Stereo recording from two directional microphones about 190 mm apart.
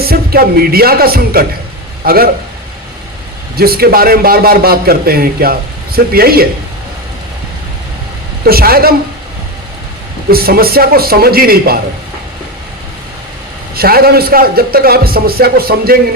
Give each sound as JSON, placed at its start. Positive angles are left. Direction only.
{"t": 0.0, "sound": "a man's voice", "side_deg": -55}
{"t": 3.6, "sound": "a man's voice", "side_deg": -55}
{"t": 8.4, "sound": "a man's voice", "side_deg": -55}
{"t": 10.2, "sound": "a man's voice", "side_deg": -55}
{"t": 13.7, "sound": "a man's voice", "side_deg": -55}